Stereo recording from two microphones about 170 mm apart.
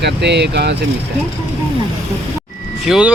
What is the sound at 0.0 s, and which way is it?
Speech, 85° right.